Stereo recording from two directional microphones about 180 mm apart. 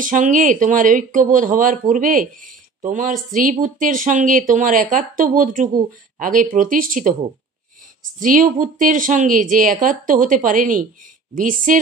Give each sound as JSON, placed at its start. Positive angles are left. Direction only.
{"t": 0.0, "sound": "speech", "side_deg": -45}
{"t": 8.2, "sound": "speech", "side_deg": -45}